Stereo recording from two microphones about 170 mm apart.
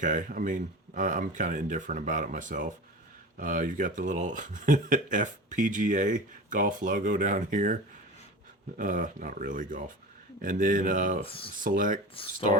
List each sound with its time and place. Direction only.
0.0 s speech: 50° right (ahead or behind)
8.8 s speech: 50° right (ahead or behind)